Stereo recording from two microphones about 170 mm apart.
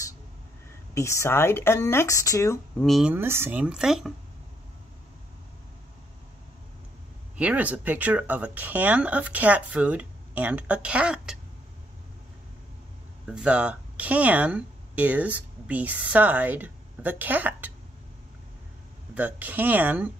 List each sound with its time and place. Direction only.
0.9 s speech: 15° left (ahead or behind)
2.8 s speech: centre (ahead or behind)
7.3 s speech: 10° right (ahead or behind)
13.2 s speech: 5° right (ahead or behind)
19.1 s speech: 10° right (ahead or behind)